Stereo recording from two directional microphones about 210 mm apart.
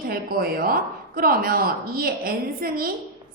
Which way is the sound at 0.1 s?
45° right (ahead or behind).